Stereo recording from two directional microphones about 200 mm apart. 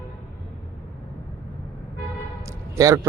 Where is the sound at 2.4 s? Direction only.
15° right (ahead or behind).